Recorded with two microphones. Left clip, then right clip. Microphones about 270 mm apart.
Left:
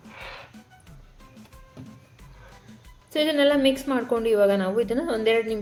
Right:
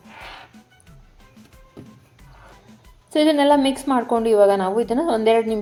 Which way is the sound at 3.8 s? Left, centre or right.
Right.